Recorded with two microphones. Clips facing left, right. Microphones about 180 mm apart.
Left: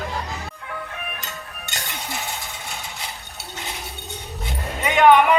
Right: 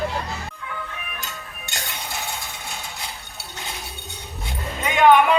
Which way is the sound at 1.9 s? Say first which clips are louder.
Left 1 dB; centre (ahead or behind).